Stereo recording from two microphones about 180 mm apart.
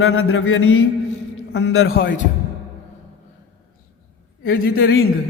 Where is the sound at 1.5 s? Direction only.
65° left (ahead or behind).